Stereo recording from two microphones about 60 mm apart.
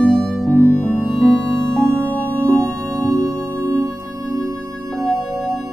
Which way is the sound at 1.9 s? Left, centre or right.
Left.